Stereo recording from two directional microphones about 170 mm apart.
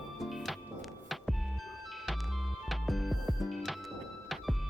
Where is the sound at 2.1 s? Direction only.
Centre (ahead or behind).